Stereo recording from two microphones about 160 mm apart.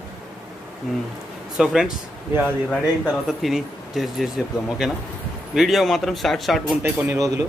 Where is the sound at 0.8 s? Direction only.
5° right (ahead or behind).